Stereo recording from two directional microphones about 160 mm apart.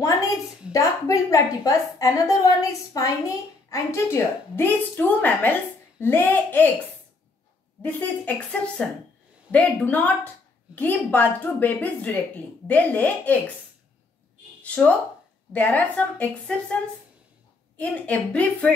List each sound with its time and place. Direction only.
0.7 s a woman's voice: 20° left (ahead or behind)
7.8 s a woman's voice: 10° left (ahead or behind)
14.6 s a sound: 10° left (ahead or behind)
15.5 s a woman's voice: 10° left (ahead or behind)
17.7 s a woman's voice: 10° left (ahead or behind)